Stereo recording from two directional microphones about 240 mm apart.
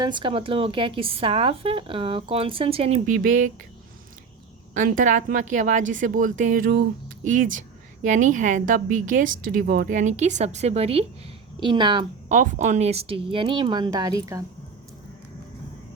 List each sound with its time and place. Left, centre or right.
0.0 s a woman's voice: centre
4.7 s a woman's voice: right
12.4 s speech: right; by 14.4 s centre